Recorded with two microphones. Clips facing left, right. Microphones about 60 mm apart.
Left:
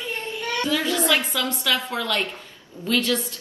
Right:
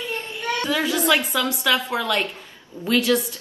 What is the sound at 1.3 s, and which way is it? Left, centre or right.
A woman's voice, right.